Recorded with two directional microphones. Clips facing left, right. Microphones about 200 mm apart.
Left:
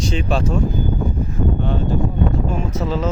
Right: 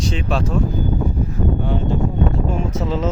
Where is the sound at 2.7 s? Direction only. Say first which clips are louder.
Even; 20° right (ahead or behind).